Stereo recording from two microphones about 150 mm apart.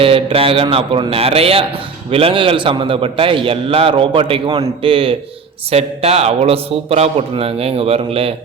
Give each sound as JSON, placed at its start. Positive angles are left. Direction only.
{"t": 0.0, "sound": "a man's voice", "side_deg": -35}